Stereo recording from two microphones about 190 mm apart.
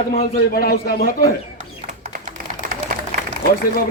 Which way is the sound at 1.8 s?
40° right (ahead or behind).